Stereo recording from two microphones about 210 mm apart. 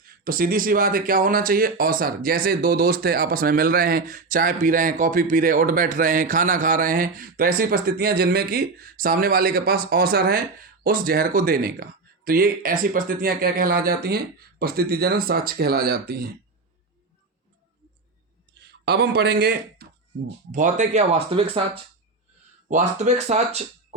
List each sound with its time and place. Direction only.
0.0 s speech: 45° right (ahead or behind)
18.6 s speech: 50° right (ahead or behind); by 21.6 s 25° right (ahead or behind)
22.7 s speech: 35° right (ahead or behind)